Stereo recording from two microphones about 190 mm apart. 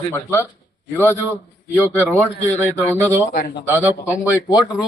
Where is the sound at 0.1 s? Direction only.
15° left (ahead or behind).